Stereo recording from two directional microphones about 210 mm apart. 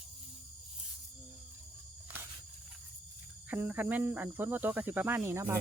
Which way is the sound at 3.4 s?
10° right (ahead or behind).